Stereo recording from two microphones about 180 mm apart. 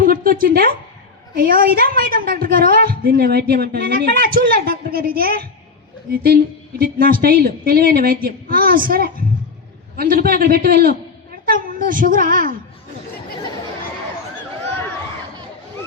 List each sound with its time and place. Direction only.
0.0 s a woman's voice: 55° right (ahead or behind)